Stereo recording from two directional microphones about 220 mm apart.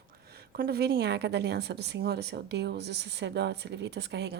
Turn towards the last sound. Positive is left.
turn(degrees=-50)  # may be behind; listen again after turning